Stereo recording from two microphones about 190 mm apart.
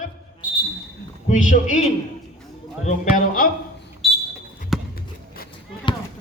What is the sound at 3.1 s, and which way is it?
Speech, 45° left (ahead or behind).